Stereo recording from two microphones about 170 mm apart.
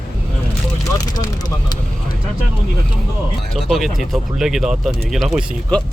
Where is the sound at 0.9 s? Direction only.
20° left (ahead or behind).